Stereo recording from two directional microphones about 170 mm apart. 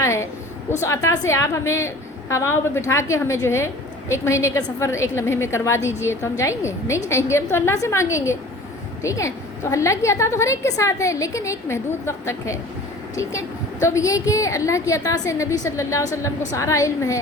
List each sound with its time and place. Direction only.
0.0 s a sound: 15° left (ahead or behind)
0.8 s a woman's voice: 20° left (ahead or behind)
13.8 s a woman's voice: 20° left (ahead or behind)